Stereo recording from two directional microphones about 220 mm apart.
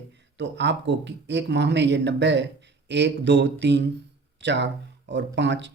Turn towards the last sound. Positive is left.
turn(degrees=-55)  # may be behind; listen again after turning